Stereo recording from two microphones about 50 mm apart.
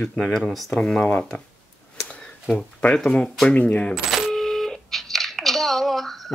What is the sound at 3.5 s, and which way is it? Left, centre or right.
Speech, left.